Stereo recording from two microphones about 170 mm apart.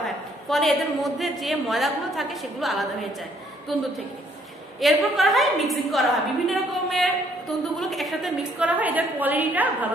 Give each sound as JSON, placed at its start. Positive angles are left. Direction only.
{"t": 0.0, "sound": "a woman's voice", "side_deg": 0}